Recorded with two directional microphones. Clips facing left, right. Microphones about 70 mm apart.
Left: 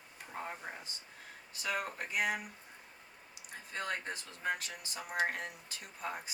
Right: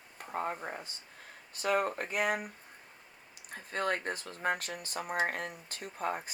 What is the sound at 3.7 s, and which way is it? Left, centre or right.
Speech, right.